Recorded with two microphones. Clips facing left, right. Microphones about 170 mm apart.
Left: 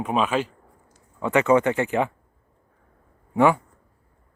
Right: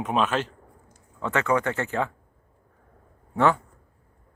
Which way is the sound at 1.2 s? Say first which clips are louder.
Left 6 dB; 15° left (ahead or behind).